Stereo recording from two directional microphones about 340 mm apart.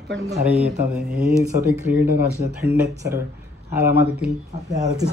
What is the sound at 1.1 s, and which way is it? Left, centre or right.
Speech, centre.